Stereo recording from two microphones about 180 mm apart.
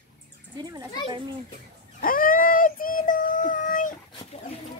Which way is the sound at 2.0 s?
50° left (ahead or behind).